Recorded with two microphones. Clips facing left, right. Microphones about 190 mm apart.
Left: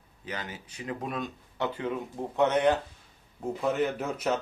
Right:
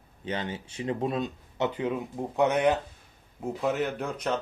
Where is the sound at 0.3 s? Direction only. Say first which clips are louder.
Right 6 dB; 25° right (ahead or behind).